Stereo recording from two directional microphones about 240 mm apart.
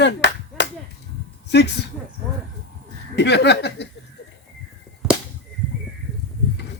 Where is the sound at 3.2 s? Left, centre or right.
Left.